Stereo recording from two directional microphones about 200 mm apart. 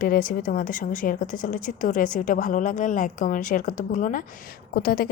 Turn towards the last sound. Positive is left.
turn(degrees=45)  # may be behind; listen again after turning